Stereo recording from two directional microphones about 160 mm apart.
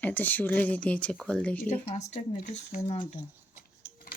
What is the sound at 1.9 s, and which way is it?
Speech, 45° left (ahead or behind).